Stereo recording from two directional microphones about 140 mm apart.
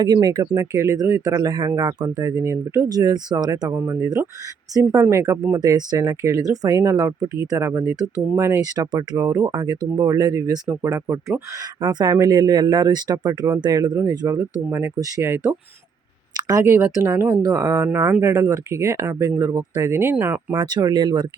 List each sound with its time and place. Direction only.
0.0 s speech: 30° right (ahead or behind)
16.3 s speech: 25° right (ahead or behind)
17.9 s speech: 10° right (ahead or behind)
20.6 s speech: 30° right (ahead or behind)